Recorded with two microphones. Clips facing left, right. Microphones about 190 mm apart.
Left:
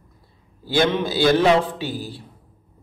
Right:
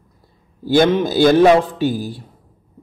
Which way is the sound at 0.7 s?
45° right (ahead or behind).